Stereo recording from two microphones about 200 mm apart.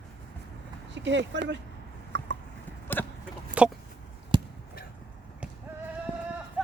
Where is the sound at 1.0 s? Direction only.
65° right (ahead or behind).